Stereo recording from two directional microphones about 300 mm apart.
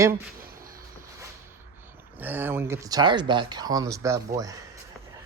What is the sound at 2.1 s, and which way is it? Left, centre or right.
Speech, centre.